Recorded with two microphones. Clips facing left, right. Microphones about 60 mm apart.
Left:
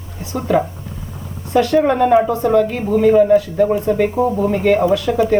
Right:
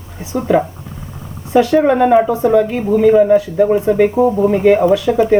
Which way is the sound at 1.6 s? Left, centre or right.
Centre.